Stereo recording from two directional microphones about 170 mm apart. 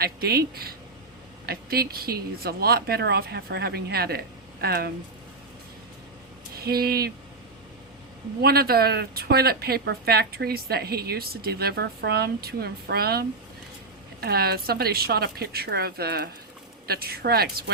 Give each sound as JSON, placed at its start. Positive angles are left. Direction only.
{"t": 0.0, "sound": "speech", "side_deg": -65}
{"t": 6.5, "sound": "speech", "side_deg": -65}
{"t": 8.4, "sound": "speech", "side_deg": -65}